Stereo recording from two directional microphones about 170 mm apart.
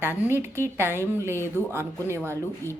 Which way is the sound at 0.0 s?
15° right (ahead or behind).